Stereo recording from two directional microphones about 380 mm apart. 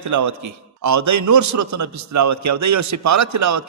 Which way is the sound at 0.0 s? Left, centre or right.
Right.